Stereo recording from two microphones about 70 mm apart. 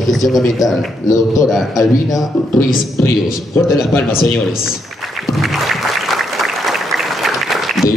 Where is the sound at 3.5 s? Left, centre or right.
Left.